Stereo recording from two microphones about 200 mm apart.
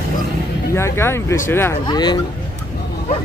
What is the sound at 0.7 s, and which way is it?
Speech, 15° left (ahead or behind).